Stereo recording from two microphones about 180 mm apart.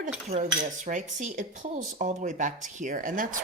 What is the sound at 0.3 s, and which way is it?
Speech, 45° right (ahead or behind).